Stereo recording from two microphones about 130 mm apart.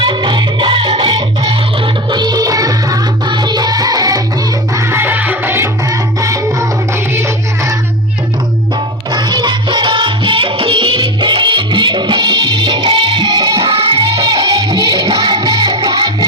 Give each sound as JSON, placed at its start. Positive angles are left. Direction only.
{"t": 0.0, "sound": "music", "side_deg": -35}
{"t": 4.7, "sound": "music", "side_deg": -20}
{"t": 9.1, "sound": "music", "side_deg": -35}